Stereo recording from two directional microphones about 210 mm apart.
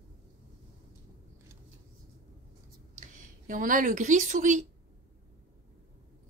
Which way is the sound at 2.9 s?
40° right (ahead or behind).